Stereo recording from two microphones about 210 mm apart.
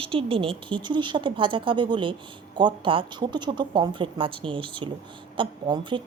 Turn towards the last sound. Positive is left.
turn(degrees=-20)  # may be behind; listen again after turning